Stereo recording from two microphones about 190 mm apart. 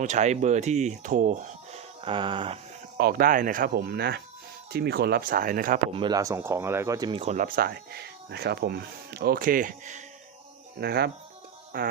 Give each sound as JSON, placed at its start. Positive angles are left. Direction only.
{"t": 0.0, "sound": "speech", "side_deg": -40}
{"t": 3.0, "sound": "speech", "side_deg": -50}
{"t": 5.9, "sound": "speech", "side_deg": -25}
{"t": 7.2, "sound": "speech", "side_deg": -40}
{"t": 10.8, "sound": "speech", "side_deg": -55}